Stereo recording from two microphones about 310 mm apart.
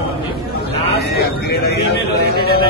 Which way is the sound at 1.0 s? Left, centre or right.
Left.